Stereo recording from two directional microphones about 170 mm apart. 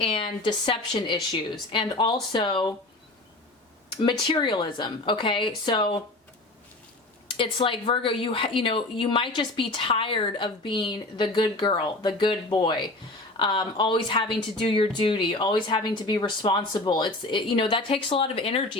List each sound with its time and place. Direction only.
0.0 s a woman's voice: 30° left (ahead or behind)
4.0 s a woman's voice: 25° left (ahead or behind)
7.3 s a woman's voice: 30° left (ahead or behind)